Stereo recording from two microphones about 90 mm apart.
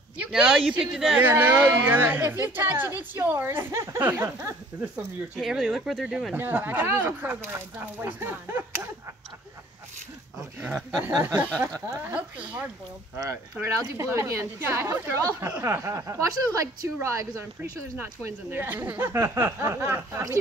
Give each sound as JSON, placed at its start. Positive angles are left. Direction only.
{"t": 0.2, "sound": "speech", "side_deg": -10}
{"t": 1.2, "sound": "speech", "side_deg": -20}
{"t": 5.4, "sound": "speech", "side_deg": -5}
{"t": 6.3, "sound": "speech", "side_deg": -20}
{"t": 10.6, "sound": "speech", "side_deg": -15}
{"t": 11.6, "sound": "speech", "side_deg": -35}
{"t": 12.1, "sound": "speech", "side_deg": -10}
{"t": 13.2, "sound": "speech", "side_deg": -35}
{"t": 15.0, "sound": "speech", "side_deg": -20}
{"t": 18.2, "sound": "speech", "side_deg": -20}